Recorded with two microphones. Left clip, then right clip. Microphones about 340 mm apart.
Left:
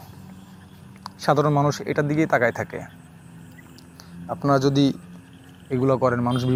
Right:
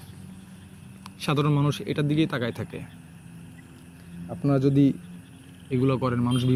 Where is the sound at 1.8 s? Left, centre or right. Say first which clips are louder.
Left 3 dB; centre.